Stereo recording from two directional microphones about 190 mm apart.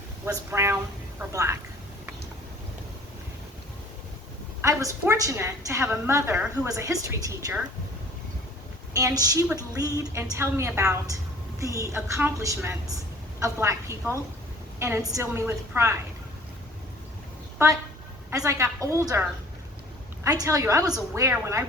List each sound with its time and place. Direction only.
0.3 s a woman's voice: 15° right (ahead or behind)
4.6 s a woman's voice: 15° right (ahead or behind)
9.0 s a woman's voice: 20° right (ahead or behind)
18.3 s a woman's voice: 15° right (ahead or behind)
20.2 s a woman's voice: 15° right (ahead or behind)